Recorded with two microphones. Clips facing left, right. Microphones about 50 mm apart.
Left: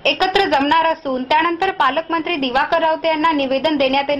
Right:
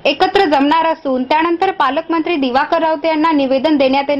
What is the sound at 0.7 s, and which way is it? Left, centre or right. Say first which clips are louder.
A woman's voice: right 2 dB; left.